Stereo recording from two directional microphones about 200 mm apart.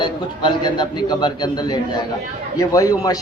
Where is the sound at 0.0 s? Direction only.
20° left (ahead or behind).